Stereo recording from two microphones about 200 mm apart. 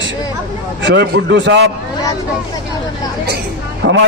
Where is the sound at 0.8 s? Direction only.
60° right (ahead or behind).